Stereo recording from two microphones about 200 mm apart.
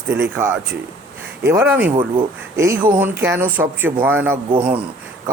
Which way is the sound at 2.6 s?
10° right (ahead or behind).